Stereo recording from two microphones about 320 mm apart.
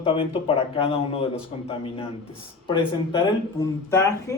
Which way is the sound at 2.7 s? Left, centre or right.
Centre.